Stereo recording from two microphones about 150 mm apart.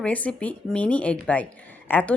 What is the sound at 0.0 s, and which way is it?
Speech, 10° left (ahead or behind).